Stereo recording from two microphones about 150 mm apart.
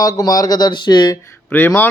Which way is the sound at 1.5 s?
15° left (ahead or behind).